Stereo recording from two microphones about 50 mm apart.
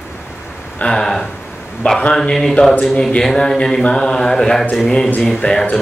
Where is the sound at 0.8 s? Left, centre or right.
Centre.